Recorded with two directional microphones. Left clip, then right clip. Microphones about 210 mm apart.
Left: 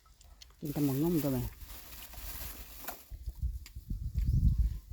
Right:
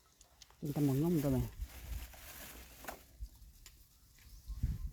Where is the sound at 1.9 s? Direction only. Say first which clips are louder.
Left 5 dB; 50° left (ahead or behind).